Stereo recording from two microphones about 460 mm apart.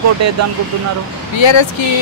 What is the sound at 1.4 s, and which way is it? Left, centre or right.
Speech, left.